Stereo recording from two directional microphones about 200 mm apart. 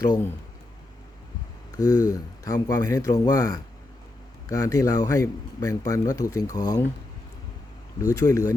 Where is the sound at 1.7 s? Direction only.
20° left (ahead or behind).